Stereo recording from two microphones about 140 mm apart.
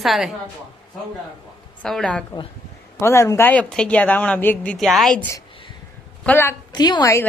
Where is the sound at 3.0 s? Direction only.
20° left (ahead or behind).